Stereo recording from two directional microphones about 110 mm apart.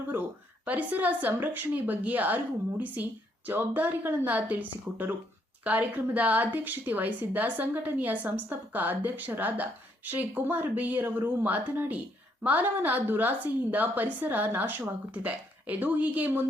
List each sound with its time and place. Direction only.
0.1 s speech: 15° right (ahead or behind)